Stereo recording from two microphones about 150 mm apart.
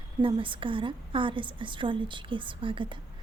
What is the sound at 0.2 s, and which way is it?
A woman's voice, 35° right (ahead or behind).